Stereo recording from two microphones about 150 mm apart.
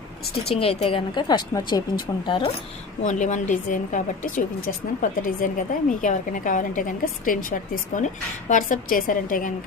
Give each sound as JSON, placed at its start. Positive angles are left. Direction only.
{"t": 0.5, "sound": "speech", "side_deg": 40}
{"t": 3.0, "sound": "a woman's voice", "side_deg": 55}